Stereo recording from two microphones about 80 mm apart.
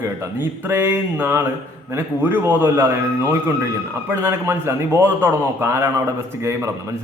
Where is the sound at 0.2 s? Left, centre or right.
Right.